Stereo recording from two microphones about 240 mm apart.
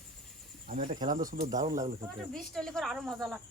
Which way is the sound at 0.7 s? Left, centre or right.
Right.